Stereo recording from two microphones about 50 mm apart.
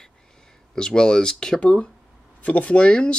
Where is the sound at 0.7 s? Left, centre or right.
Centre.